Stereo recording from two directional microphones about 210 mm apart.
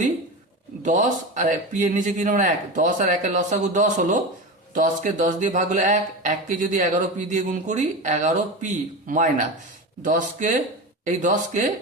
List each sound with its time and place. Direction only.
0.8 s speech: 35° right (ahead or behind)